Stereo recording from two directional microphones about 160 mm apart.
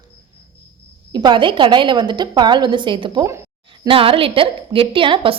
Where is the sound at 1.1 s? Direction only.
30° right (ahead or behind).